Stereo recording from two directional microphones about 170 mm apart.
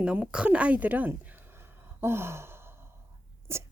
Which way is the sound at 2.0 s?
15° right (ahead or behind).